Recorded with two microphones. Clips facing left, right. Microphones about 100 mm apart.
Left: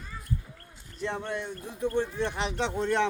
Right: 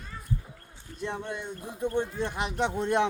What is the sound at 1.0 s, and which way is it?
Speech, 15° right (ahead or behind).